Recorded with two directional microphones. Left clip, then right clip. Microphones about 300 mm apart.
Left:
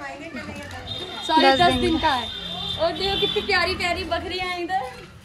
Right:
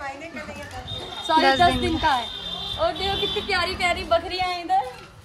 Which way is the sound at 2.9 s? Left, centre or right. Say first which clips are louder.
Left 2 dB; right.